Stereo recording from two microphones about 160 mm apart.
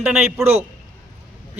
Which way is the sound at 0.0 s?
5° right (ahead or behind).